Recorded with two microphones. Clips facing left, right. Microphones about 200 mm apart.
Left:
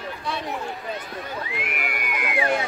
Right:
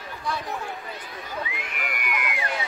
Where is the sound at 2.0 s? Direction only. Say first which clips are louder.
Left 5 dB; 45° left (ahead or behind).